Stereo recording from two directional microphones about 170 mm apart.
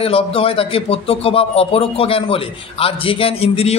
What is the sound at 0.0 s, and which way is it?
Speech, 35° left (ahead or behind).